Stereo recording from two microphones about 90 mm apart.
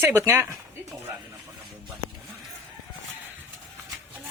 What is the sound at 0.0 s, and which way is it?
Speech, 30° right (ahead or behind).